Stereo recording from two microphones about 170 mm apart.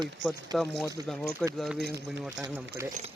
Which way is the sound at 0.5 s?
25° right (ahead or behind).